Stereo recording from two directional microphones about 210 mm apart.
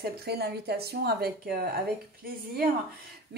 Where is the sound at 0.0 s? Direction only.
50° right (ahead or behind).